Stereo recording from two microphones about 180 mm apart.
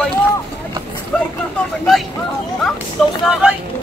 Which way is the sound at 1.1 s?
5° left (ahead or behind).